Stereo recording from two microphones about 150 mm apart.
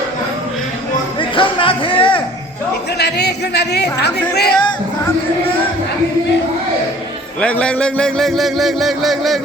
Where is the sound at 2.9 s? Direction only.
90° left.